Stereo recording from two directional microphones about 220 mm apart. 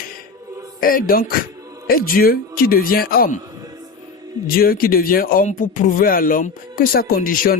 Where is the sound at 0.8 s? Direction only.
40° left (ahead or behind).